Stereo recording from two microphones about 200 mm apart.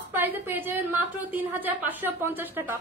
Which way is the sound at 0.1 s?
10° right (ahead or behind).